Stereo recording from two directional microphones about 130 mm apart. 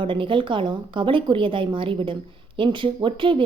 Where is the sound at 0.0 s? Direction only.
40° right (ahead or behind).